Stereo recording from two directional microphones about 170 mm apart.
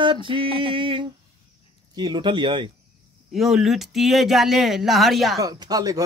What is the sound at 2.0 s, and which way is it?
Music, 25° right (ahead or behind).